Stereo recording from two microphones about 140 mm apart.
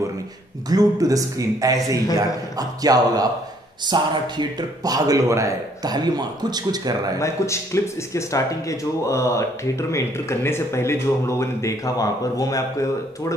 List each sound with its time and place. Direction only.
0.7 s speech: 25° right (ahead or behind)
7.2 s speech: 20° left (ahead or behind)